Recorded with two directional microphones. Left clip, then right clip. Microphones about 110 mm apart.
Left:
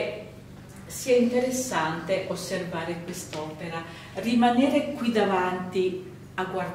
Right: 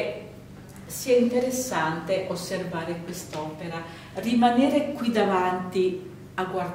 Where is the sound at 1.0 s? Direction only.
20° right (ahead or behind).